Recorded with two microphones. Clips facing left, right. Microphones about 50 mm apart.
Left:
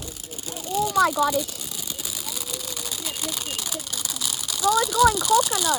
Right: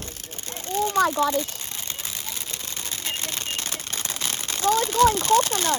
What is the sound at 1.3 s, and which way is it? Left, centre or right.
Camera, right.